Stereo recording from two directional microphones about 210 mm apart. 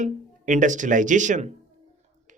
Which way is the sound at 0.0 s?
35° right (ahead or behind).